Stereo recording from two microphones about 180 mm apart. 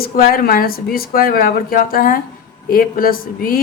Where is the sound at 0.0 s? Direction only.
55° left (ahead or behind).